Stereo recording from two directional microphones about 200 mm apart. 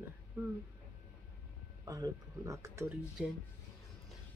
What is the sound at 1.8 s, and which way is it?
Speech, 15° right (ahead or behind).